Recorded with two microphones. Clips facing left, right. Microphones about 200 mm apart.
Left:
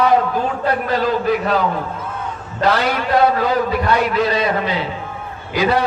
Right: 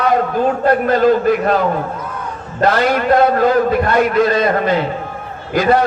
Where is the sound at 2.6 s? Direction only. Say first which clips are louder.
Right 4 dB; 50° right (ahead or behind).